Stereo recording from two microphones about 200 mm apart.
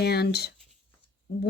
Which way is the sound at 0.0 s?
55° left (ahead or behind).